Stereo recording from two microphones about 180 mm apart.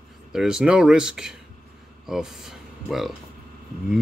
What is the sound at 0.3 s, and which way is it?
Speech, 5° right (ahead or behind).